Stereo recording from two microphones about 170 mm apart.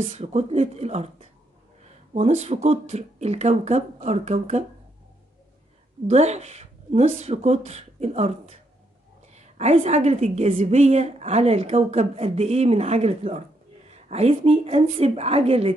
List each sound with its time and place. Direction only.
0.1 s a woman's voice: 40° right (ahead or behind)
2.1 s a woman's voice: 40° right (ahead or behind)
6.0 s a woman's voice: 40° right (ahead or behind)